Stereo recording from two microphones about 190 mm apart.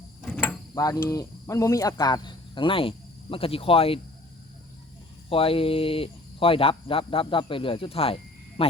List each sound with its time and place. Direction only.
0.3 s mechanisms: 10° left (ahead or behind)
1.0 s cricket: 15° left (ahead or behind)
5.3 s speech: 30° left (ahead or behind)